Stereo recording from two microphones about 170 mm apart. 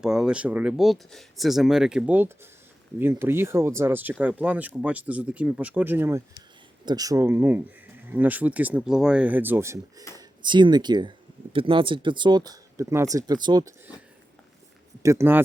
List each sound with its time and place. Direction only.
0.0 s speech: 5° right (ahead or behind)
10.2 s speech: 25° right (ahead or behind)
15.0 s speech: 15° right (ahead or behind)